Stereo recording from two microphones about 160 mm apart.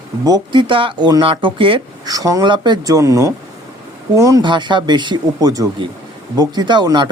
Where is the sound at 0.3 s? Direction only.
25° right (ahead or behind).